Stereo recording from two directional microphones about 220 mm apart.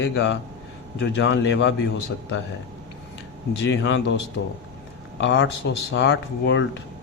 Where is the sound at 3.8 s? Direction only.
55° left (ahead or behind).